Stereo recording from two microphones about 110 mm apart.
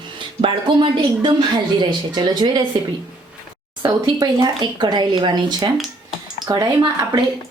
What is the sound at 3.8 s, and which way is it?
A woman's voice, 40° right (ahead or behind).